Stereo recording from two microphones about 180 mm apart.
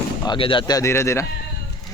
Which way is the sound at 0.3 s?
30° left (ahead or behind).